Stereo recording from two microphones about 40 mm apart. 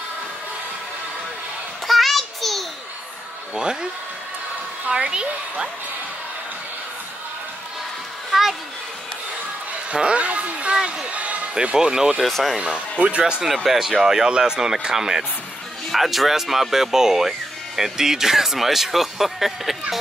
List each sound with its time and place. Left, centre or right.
1.9 s a sound: centre
4.9 s a woman's voice: right
8.3 s children playing: centre
9.8 s a sound: right
11.1 s basketball bounce: right
11.7 s speech: centre
12.2 s speech: centre
12.5 s a woman's voice: right; by 20.0 s centre